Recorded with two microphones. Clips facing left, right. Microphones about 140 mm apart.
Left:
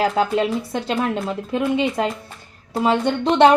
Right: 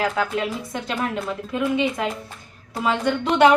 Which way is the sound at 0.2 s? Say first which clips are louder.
Left 5 dB; 30° left (ahead or behind).